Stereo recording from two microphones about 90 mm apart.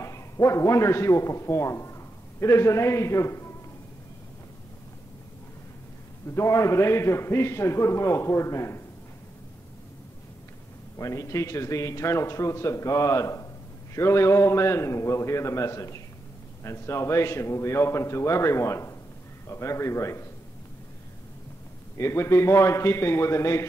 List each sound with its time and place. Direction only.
0.0 s a man's voice: 35° left (ahead or behind)
6.2 s a man's voice: 30° left (ahead or behind)
11.0 s a man's voice: 35° left (ahead or behind)
21.9 s a man's voice: 30° left (ahead or behind)